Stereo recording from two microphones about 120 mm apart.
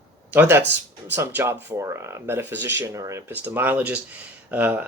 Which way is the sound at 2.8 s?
30° right (ahead or behind).